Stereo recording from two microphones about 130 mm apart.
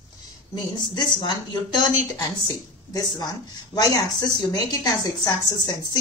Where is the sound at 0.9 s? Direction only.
35° left (ahead or behind).